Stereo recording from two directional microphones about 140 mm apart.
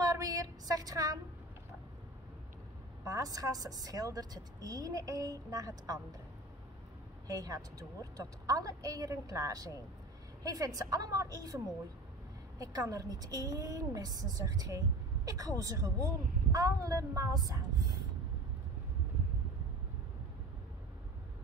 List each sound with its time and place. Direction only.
0.0 s a sound: 25° right (ahead or behind)
3.0 s a woman's voice: 25° right (ahead or behind)
7.2 s a woman's voice: 25° right (ahead or behind)